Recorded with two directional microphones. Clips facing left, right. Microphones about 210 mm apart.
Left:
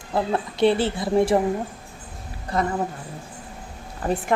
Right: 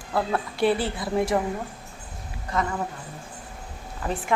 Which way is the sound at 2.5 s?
35° left (ahead or behind).